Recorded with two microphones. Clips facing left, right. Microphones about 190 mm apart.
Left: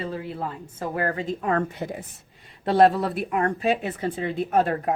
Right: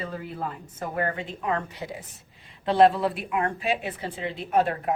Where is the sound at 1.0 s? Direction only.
40° left (ahead or behind).